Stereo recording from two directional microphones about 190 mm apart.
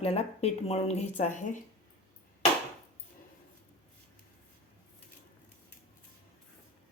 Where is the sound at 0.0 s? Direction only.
30° left (ahead or behind).